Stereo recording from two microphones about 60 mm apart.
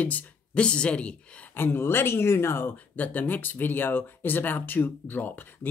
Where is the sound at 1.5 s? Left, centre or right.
Left.